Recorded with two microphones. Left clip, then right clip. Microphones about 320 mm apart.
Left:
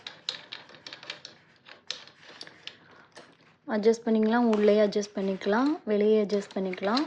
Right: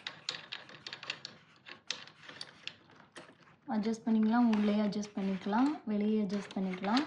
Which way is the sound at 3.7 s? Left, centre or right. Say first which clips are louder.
Left 11 dB; left.